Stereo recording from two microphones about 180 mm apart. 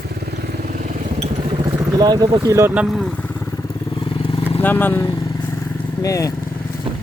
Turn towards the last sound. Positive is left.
turn(degrees=20)  # may be behind; listen again after turning